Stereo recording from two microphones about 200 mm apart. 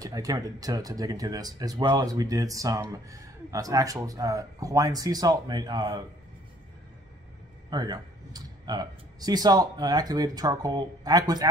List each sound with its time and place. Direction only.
0.0 s speech: 15° right (ahead or behind)
7.7 s speech: 20° right (ahead or behind)